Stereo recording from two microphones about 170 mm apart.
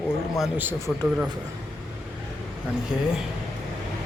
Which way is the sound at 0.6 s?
15° right (ahead or behind).